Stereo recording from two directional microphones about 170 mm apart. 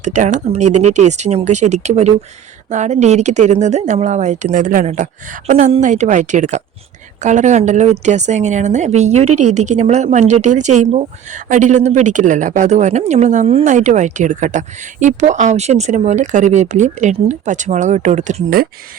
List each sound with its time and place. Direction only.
0.0 s a woman's voice: 45° right (ahead or behind)